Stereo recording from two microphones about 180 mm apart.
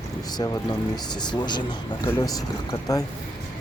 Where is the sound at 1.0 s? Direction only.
25° left (ahead or behind).